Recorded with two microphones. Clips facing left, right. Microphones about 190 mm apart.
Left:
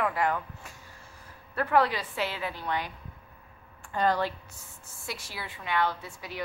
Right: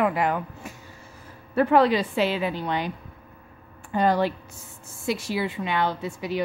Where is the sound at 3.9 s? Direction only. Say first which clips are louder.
Right 5 dB; 15° right (ahead or behind).